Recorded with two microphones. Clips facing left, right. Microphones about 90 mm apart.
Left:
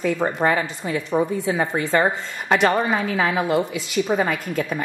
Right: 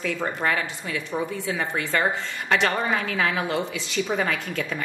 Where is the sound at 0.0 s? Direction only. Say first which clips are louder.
Left 6 dB; 25° left (ahead or behind).